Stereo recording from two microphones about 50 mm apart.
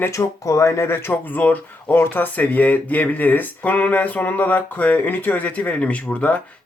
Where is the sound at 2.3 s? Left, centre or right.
Left.